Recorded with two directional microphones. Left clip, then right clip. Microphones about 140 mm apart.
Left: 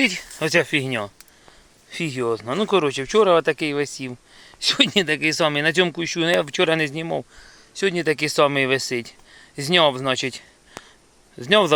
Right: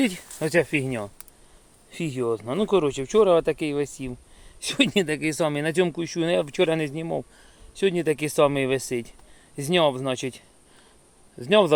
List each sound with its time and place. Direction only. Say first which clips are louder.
0.0 s speech: left 5 dB; 25° right (ahead or behind)
0.3 s speech: left 1 dB; 10° right (ahead or behind)
7.8 s speech: left 2 dB; 15° right (ahead or behind)